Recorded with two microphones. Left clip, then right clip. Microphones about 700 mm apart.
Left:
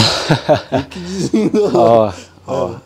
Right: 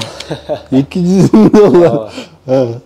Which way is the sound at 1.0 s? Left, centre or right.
Right.